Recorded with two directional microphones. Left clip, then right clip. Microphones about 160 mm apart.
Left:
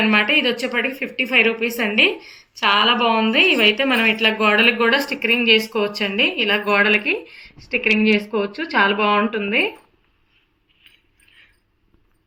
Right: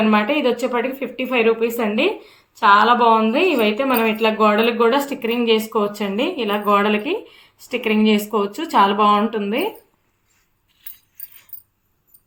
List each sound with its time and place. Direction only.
0.1 s a woman's voice: 45° right (ahead or behind)
7.9 s speech: 55° right (ahead or behind)